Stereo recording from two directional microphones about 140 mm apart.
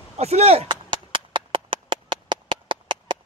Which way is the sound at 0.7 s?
35° right (ahead or behind).